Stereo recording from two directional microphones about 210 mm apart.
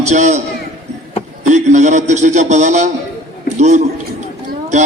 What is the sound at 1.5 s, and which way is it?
A man's voice, 35° right (ahead or behind).